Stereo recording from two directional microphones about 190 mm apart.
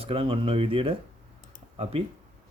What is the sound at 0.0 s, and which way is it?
Speech, 30° right (ahead or behind).